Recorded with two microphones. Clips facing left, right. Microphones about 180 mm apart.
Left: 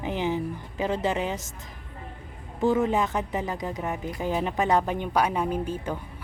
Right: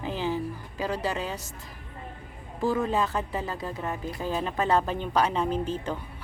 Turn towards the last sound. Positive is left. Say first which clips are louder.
# even
turn(degrees=10)  # may be behind; listen again after turning